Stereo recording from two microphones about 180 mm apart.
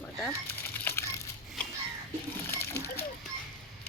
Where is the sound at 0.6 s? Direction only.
10° left (ahead or behind).